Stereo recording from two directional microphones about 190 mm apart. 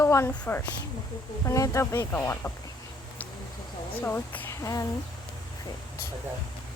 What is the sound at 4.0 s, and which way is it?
Speech, 10° left (ahead or behind).